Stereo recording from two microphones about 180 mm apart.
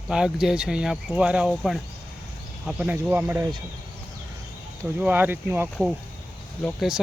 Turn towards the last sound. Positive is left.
turn(degrees=0)  # may be behind; listen again after turning